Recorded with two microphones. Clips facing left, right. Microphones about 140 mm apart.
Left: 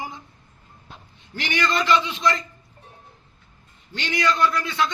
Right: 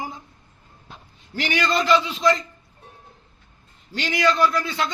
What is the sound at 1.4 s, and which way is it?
Speech, 30° right (ahead or behind).